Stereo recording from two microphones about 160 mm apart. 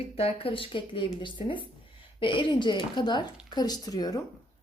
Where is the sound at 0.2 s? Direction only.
35° left (ahead or behind).